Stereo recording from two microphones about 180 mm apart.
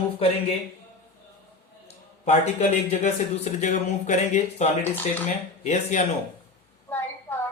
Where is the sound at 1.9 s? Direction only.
40° left (ahead or behind).